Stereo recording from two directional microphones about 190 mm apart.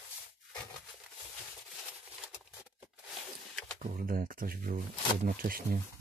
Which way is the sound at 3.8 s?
45° right (ahead or behind).